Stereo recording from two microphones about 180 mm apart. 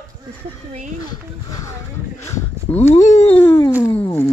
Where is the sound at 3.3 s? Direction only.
10° left (ahead or behind).